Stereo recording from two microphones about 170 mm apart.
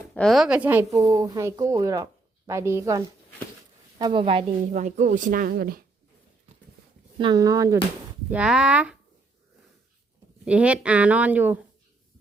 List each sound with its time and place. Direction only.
0.1 s speech: centre (ahead or behind); by 3.0 s 15° right (ahead or behind)
3.9 s speech: 30° right (ahead or behind)
4.7 s speech: 45° right (ahead or behind)
7.2 s speech: 25° right (ahead or behind)
8.3 s speech: 5° right (ahead or behind)
10.4 s speech: 5° right (ahead or behind)